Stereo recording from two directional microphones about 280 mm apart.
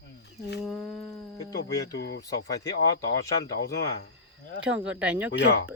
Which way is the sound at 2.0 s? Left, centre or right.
Left.